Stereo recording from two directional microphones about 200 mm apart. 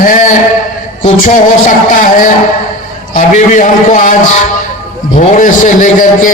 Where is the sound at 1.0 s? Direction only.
40° left (ahead or behind).